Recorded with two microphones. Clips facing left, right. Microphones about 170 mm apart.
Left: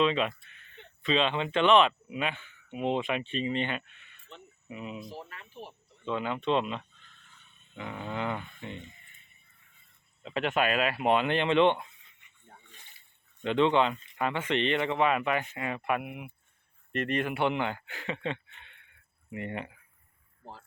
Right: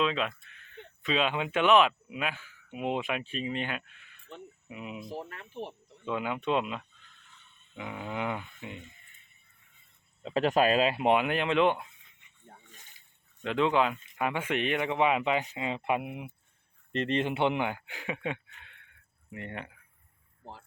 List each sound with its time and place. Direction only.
0.0 s speech: centre (ahead or behind)
4.3 s a sound: 10° right (ahead or behind)
5.6 s speech: 20° right (ahead or behind)
6.1 s speech: 10° right (ahead or behind)
10.2 s speech: 35° right (ahead or behind); by 11.9 s 5° right (ahead or behind)
13.4 s speech: centre (ahead or behind)
18.5 s a sound: centre (ahead or behind)
19.3 s speech: 5° left (ahead or behind)
20.4 s a sound: 20° right (ahead or behind)